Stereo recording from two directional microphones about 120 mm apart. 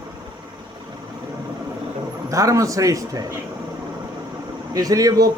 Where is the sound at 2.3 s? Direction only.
25° right (ahead or behind).